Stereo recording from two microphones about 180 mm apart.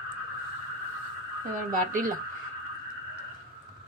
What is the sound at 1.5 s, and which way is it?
Speech, 50° right (ahead or behind).